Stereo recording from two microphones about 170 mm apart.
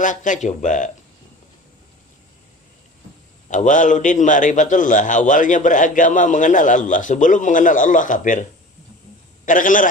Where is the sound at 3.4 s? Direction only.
45° left (ahead or behind).